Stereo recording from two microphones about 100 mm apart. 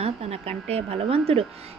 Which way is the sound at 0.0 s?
90° right.